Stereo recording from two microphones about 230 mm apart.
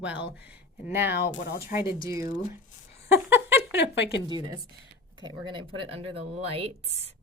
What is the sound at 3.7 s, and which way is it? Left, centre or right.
Speech, left.